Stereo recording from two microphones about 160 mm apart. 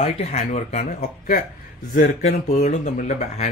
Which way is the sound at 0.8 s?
60° left (ahead or behind).